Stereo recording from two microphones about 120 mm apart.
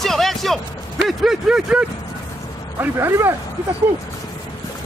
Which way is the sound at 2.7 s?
20° right (ahead or behind).